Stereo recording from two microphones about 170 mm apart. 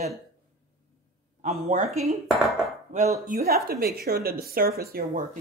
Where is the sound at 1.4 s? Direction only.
45° right (ahead or behind).